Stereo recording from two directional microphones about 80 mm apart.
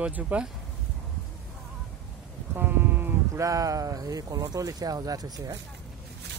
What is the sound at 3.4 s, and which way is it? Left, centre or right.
Speech, right.